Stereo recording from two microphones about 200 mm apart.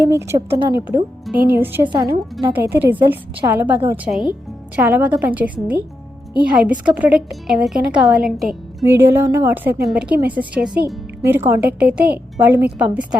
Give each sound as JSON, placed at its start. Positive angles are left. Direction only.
{"t": 0.0, "sound": "a woman's voice", "side_deg": -10}